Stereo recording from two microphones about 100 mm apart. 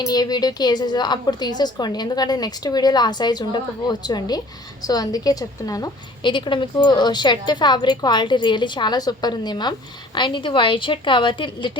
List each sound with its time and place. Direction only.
0.0 s a woman's voice: 40° left (ahead or behind)
6.2 s a woman's voice: 55° left (ahead or behind)